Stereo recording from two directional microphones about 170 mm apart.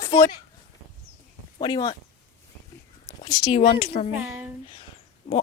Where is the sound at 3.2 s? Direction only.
30° left (ahead or behind).